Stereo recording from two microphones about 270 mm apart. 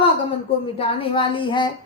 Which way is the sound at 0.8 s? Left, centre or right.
Centre.